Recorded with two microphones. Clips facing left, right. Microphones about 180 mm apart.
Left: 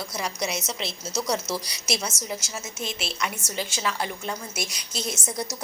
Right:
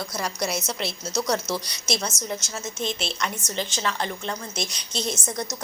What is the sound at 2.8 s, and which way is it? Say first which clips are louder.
A woman's voice: right 2 dB; 5° left (ahead or behind).